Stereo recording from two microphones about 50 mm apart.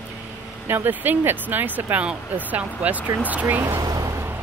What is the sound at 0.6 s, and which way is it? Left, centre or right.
Speech, right.